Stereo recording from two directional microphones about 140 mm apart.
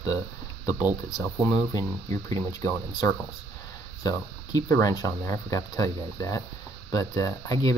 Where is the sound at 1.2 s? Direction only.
25° left (ahead or behind).